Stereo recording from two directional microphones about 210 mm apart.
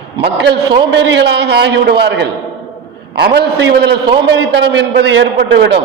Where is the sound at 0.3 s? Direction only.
55° right (ahead or behind).